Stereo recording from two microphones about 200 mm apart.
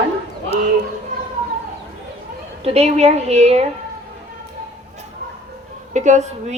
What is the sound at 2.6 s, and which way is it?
A woman's voice, 30° right (ahead or behind).